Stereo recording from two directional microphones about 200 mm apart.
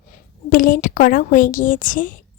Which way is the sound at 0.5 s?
45° left (ahead or behind).